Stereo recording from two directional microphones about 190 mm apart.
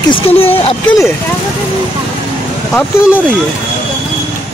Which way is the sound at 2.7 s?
5° left (ahead or behind).